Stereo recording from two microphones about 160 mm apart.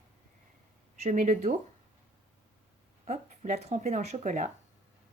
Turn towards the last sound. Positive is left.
turn(degrees=-50)  # may be behind; listen again after turning